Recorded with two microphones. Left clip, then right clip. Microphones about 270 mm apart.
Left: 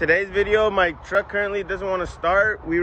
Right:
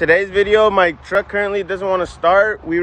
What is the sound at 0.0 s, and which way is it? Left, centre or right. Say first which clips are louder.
Speech: right 6 dB; centre.